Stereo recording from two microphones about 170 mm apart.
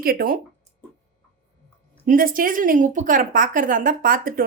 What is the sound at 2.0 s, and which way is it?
Speech, 55° right (ahead or behind).